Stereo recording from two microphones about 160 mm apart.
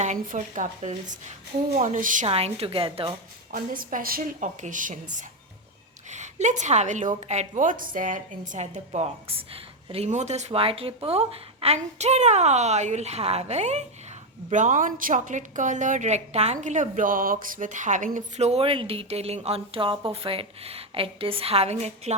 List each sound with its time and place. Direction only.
0.0 s a woman's voice: 50° right (ahead or behind)
2.2 s a woman's voice: 40° right (ahead or behind)
3.5 s a woman's voice: 65° right (ahead or behind); by 22.1 s 40° right (ahead or behind)